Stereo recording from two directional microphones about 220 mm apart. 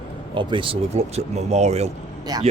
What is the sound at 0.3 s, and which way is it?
Speech, 20° right (ahead or behind).